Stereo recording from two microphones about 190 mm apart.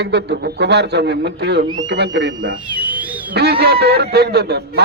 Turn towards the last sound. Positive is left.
turn(degrees=-60)  # may be behind; listen again after turning